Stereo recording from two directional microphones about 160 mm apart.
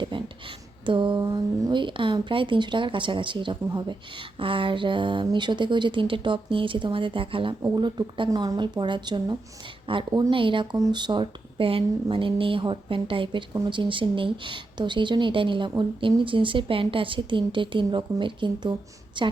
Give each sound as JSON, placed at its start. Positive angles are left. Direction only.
{"t": 0.0, "sound": "speech", "side_deg": -30}